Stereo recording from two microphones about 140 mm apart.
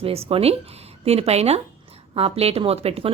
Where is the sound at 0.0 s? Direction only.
45° right (ahead or behind).